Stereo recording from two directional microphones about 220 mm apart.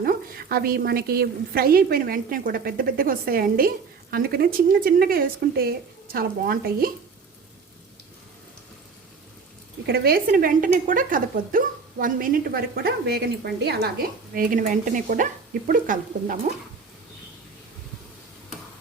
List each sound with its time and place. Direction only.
0.0 s a woman's voice: 45° right (ahead or behind)
9.8 s speech: 45° right (ahead or behind)
14.3 s speech: 35° right (ahead or behind)